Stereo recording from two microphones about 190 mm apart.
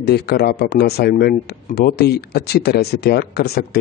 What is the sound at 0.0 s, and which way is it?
Speech, 60° left (ahead or behind).